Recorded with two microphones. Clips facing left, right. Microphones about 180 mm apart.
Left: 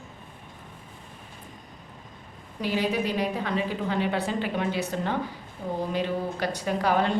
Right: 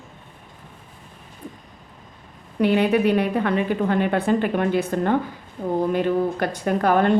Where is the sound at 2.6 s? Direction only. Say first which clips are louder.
Right 9 dB; 60° right (ahead or behind).